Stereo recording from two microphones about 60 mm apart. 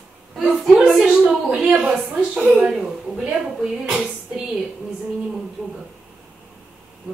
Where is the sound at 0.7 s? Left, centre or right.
Centre.